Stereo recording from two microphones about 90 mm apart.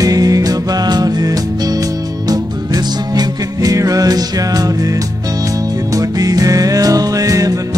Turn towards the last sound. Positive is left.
turn(degrees=-40)  # may be behind; listen again after turning